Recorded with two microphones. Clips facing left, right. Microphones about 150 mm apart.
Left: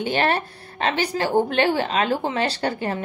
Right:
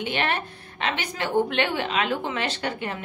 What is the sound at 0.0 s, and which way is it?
A woman's voice, 35° left (ahead or behind).